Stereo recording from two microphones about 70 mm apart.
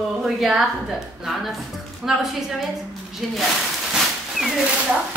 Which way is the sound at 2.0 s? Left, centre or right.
Centre.